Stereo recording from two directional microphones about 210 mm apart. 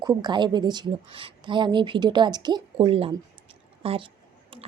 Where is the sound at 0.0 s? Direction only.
20° right (ahead or behind).